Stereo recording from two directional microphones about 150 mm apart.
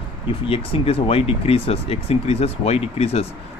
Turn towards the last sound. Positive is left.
turn(degrees=45)  # may be behind; listen again after turning